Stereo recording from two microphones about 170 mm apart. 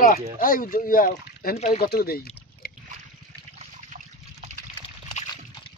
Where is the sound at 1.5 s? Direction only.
40° left (ahead or behind).